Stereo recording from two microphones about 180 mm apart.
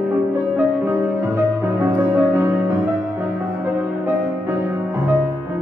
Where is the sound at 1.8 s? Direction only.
10° right (ahead or behind).